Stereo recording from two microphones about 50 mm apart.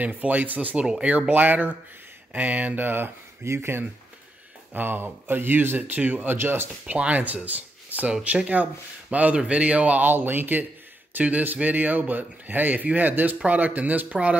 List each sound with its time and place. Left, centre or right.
0.0 s a man's voice: right
3.4 s speech: right
4.7 s a man's voice: right
6.3 s speech: right
6.9 s a man's voice: right